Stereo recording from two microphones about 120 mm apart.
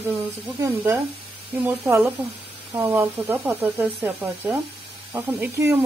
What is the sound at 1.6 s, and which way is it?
Speech, 20° right (ahead or behind).